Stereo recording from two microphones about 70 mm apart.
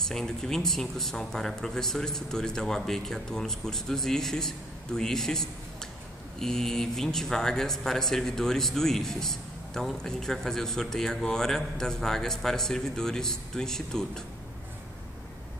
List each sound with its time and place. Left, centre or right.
0.0 s speech: centre